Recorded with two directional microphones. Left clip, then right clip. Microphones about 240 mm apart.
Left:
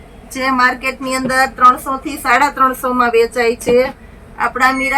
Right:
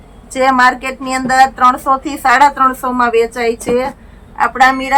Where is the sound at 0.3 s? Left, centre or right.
Centre.